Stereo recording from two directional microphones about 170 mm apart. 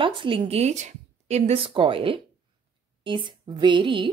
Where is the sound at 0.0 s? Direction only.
30° right (ahead or behind).